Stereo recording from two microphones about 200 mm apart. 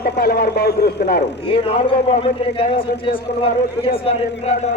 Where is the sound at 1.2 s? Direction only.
30° left (ahead or behind).